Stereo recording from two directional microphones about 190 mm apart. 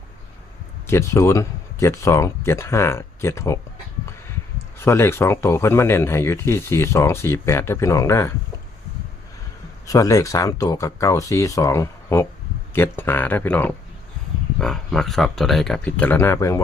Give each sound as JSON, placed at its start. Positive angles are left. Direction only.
{"t": 0.9, "sound": "speech", "side_deg": 15}
{"t": 4.8, "sound": "speech", "side_deg": 15}
{"t": 9.8, "sound": "speech", "side_deg": 20}